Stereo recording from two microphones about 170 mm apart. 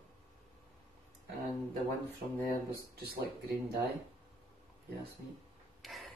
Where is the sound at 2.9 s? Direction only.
65° right (ahead or behind).